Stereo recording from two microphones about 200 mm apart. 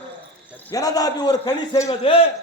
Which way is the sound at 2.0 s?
30° left (ahead or behind).